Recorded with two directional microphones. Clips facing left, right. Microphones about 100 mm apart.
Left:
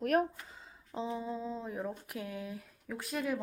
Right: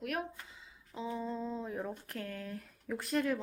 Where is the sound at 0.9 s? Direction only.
25° left (ahead or behind).